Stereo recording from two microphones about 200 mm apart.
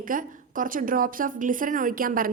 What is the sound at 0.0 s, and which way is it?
A woman's voice, 45° right (ahead or behind).